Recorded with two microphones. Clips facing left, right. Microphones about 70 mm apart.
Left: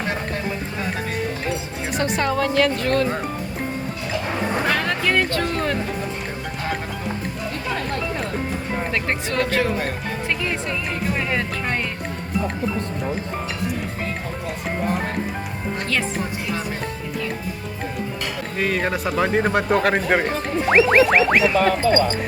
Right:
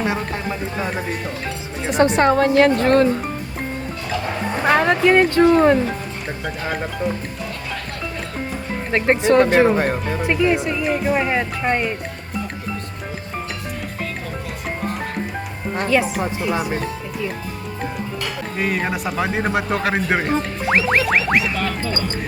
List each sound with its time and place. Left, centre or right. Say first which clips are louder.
1.9 s speech: right 7 dB; right
2.2 s a woman's voice: right 4 dB; right
4.6 s speech: right 10 dB; right
8.9 s speech: right 13 dB; right
10.2 s speech: right 8 dB; centre
15.9 s speech: right 7 dB; centre
18.5 s speech: even; centre
21.6 s speech: left 7 dB; centre